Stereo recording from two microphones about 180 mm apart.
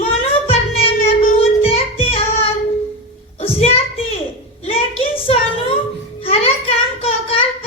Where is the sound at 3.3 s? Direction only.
35° left (ahead or behind).